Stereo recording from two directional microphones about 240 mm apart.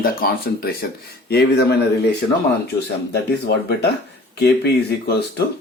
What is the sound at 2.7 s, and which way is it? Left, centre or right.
Speech, left.